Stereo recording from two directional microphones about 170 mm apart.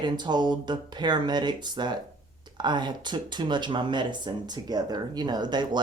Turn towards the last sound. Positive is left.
turn(degrees=-25)  # may be behind; listen again after turning